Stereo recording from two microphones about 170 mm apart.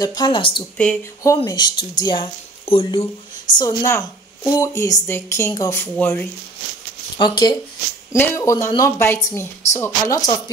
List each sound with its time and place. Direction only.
0.0 s speech: 25° left (ahead or behind)
0.8 s speech: 5° left (ahead or behind)
1.2 s speech: 15° left (ahead or behind); by 3.1 s 35° left (ahead or behind)
3.5 s speech: 20° left (ahead or behind)
7.2 s speech: 25° left (ahead or behind)